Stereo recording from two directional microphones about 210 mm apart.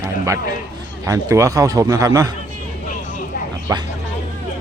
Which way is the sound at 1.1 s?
15° right (ahead or behind).